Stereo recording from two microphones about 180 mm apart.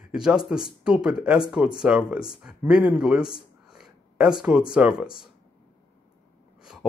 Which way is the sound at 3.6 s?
5° right (ahead or behind).